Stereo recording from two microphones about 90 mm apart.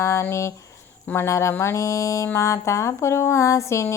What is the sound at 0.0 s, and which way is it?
Speech, 30° left (ahead or behind).